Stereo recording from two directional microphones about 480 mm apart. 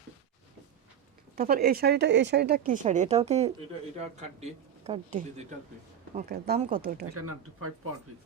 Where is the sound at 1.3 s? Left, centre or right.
Centre.